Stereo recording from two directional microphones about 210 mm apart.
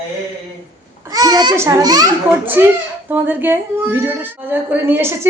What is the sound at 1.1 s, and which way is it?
A child's voice, 20° right (ahead or behind).